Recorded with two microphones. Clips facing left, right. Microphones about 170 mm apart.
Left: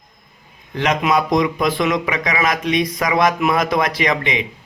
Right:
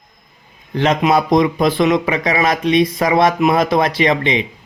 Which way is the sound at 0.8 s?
30° right (ahead or behind).